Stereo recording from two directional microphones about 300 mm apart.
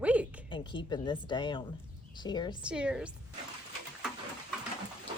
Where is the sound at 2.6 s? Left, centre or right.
Centre.